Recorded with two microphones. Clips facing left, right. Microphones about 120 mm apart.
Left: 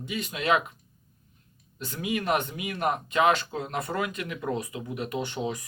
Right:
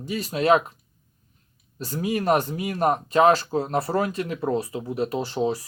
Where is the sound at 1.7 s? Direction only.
35° right (ahead or behind).